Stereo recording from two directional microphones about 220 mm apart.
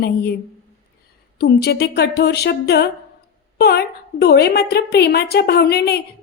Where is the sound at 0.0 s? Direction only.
45° left (ahead or behind).